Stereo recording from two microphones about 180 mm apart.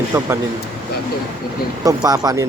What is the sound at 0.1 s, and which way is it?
Speech, 15° right (ahead or behind).